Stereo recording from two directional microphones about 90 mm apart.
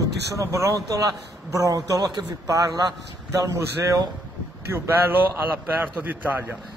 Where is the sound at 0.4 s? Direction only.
35° right (ahead or behind); by 6.1 s 20° right (ahead or behind).